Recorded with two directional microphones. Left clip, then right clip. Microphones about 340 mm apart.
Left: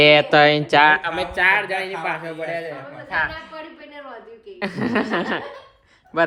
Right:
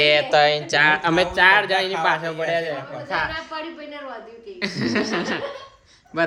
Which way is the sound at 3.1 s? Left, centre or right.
Right.